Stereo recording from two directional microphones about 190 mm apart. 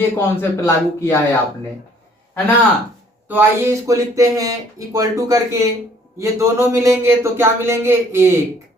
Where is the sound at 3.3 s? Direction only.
15° right (ahead or behind).